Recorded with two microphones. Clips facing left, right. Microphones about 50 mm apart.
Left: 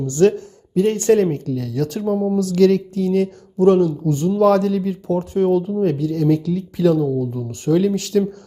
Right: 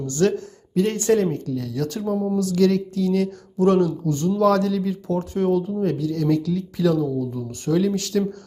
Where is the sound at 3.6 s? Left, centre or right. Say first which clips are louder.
Left 4 dB; centre.